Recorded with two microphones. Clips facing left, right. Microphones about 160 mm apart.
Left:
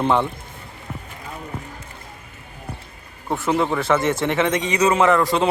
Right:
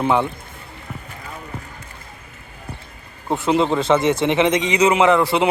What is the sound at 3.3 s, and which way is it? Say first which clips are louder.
A man's voice: right 3 dB; 20° right (ahead or behind).